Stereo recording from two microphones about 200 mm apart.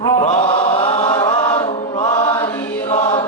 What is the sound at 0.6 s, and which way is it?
Chant, 25° left (ahead or behind).